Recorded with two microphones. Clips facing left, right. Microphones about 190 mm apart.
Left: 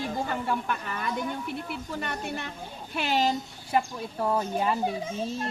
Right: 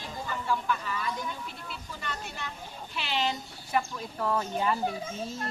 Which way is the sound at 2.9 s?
45° left (ahead or behind).